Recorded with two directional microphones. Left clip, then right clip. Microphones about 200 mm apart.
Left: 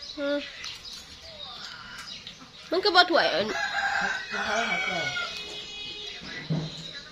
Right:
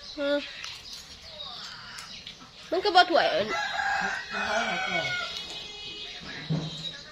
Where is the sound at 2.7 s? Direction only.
10° left (ahead or behind).